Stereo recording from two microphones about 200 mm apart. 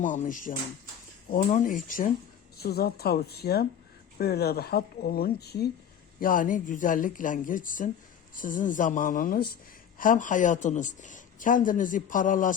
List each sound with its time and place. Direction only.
0.0 s speech: 40° left (ahead or behind)
2.6 s speech: 50° left (ahead or behind)